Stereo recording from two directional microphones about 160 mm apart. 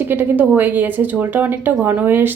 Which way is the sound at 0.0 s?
10° right (ahead or behind).